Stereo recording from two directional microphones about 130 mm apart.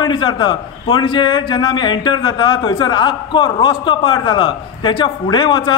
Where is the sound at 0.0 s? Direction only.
35° left (ahead or behind).